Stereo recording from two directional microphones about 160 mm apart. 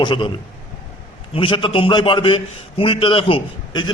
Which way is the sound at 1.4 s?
30° left (ahead or behind).